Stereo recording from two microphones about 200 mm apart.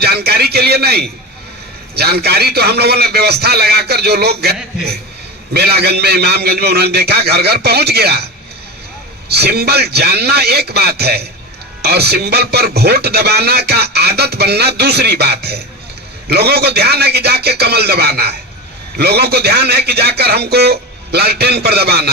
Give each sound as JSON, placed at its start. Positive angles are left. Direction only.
{"t": 0.0, "sound": "a sound", "side_deg": -50}
{"t": 2.0, "sound": "a man's voice", "side_deg": -55}
{"t": 5.5, "sound": "a man's voice", "side_deg": -55}
{"t": 9.3, "sound": "a man's voice", "side_deg": -50}